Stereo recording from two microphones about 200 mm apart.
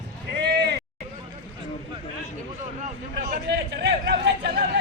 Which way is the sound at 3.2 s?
45° right (ahead or behind).